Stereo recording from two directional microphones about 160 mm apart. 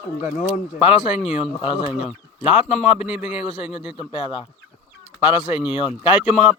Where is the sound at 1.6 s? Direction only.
30° left (ahead or behind).